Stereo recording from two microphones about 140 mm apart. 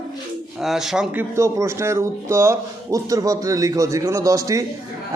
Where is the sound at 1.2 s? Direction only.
20° right (ahead or behind).